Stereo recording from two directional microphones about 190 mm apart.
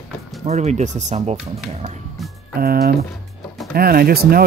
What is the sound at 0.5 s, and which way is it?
Speech, 35° right (ahead or behind).